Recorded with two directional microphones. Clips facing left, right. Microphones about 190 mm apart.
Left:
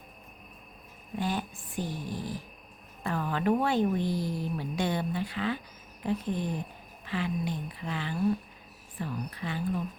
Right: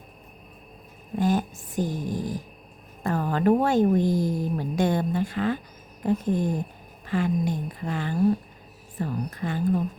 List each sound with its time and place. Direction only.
1.1 s speech: 45° right (ahead or behind)